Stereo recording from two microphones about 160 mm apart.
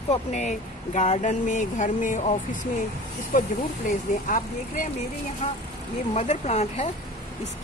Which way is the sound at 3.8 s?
55° left (ahead or behind).